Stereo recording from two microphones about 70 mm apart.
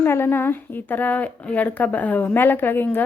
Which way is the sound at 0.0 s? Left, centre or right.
Left.